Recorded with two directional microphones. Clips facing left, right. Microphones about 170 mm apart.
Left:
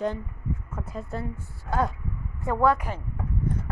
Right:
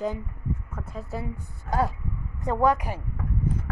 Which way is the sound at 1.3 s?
15° right (ahead or behind).